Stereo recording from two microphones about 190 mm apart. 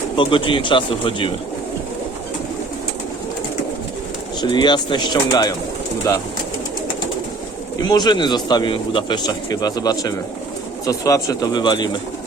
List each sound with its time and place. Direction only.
0.2 s speech: 25° left (ahead or behind)
4.4 s speech: 25° left (ahead or behind)
7.8 s speech: 20° left (ahead or behind)